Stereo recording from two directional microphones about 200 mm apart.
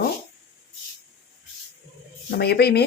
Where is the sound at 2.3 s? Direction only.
55° left (ahead or behind).